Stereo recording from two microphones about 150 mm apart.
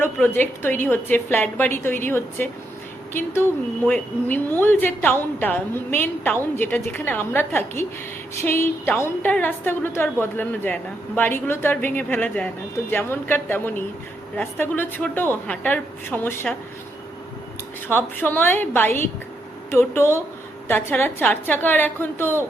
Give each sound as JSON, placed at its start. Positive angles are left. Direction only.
{"t": 0.0, "sound": "a woman's voice", "side_deg": 15}
{"t": 17.8, "sound": "a woman's voice", "side_deg": 15}